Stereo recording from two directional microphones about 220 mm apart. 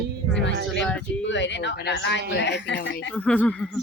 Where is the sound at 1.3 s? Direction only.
55° left (ahead or behind).